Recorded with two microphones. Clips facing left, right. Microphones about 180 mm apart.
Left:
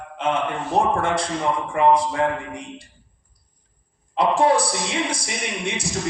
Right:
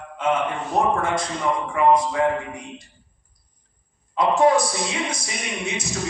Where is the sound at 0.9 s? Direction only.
30° left (ahead or behind).